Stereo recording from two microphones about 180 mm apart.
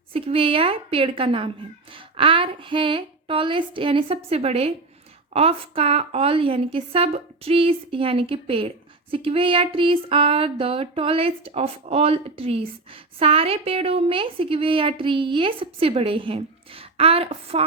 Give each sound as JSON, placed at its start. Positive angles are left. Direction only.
{"t": 0.1, "sound": "a woman's voice", "side_deg": -30}